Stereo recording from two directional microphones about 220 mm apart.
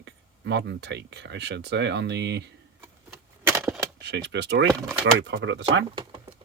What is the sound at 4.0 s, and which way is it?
Speech, 50° right (ahead or behind).